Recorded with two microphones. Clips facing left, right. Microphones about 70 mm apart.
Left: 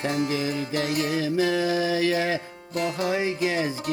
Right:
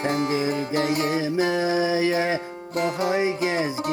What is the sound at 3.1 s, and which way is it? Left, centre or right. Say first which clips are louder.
Music: right 2 dB; right.